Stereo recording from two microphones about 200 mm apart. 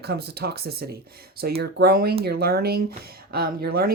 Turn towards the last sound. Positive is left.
turn(degrees=-50)  # may be behind; listen again after turning